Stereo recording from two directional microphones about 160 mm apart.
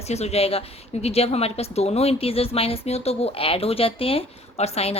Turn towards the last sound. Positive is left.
turn(degrees=40)  # may be behind; listen again after turning